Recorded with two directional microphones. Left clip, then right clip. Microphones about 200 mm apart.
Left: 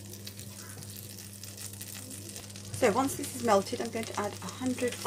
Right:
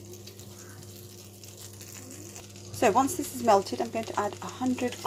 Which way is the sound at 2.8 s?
35° right (ahead or behind).